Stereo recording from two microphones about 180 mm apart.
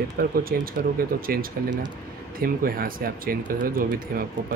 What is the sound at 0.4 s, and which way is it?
Speech, 55° right (ahead or behind).